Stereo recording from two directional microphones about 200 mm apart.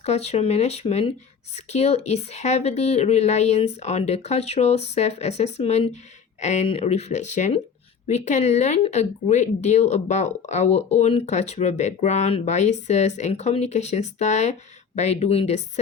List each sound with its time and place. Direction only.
0.0 s speech: 30° left (ahead or behind)